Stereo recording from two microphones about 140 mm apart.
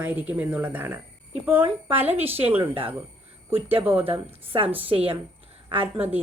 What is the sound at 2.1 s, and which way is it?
Speech, 15° right (ahead or behind).